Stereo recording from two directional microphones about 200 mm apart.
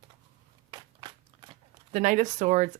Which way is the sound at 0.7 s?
25° right (ahead or behind).